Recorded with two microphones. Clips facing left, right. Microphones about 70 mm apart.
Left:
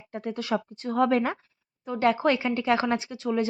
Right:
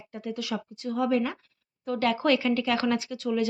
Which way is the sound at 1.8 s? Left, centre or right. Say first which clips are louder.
Left 2 dB; left.